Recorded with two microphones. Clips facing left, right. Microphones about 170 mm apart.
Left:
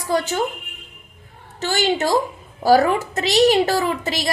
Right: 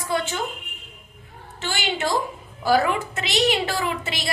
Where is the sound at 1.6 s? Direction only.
40° left (ahead or behind).